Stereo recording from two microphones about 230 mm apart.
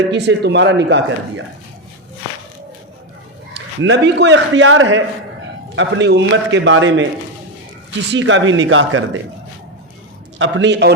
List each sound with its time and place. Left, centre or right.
0.1 s a man's voice: right
3.5 s a man's voice: right
8.1 s speech: right
10.3 s a man's voice: right